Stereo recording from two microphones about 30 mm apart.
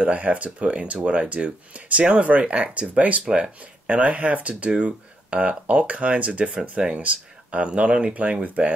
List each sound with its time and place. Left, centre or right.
0.0 s speech: right
5.3 s speech: right
8.1 s speech: right